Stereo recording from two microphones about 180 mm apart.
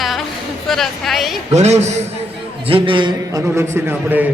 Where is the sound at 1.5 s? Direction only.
40° right (ahead or behind).